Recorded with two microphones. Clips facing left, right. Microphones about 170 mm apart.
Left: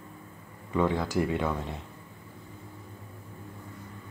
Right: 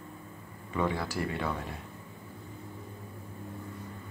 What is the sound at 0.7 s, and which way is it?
Speech, 15° left (ahead or behind).